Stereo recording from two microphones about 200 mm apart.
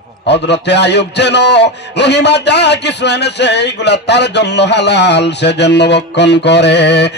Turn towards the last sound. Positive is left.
turn(degrees=60)  # may be behind; listen again after turning